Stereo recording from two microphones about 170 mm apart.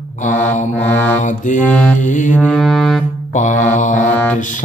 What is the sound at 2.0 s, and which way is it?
Music, 45° left (ahead or behind).